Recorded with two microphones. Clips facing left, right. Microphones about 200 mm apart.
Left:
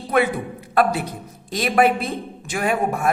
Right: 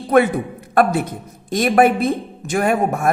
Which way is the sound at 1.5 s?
50° right (ahead or behind).